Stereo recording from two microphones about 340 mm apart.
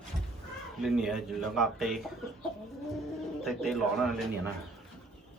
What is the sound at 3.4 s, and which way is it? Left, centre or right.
Speech, centre.